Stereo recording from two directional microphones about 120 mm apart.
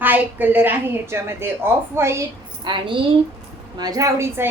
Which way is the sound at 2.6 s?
45° right (ahead or behind).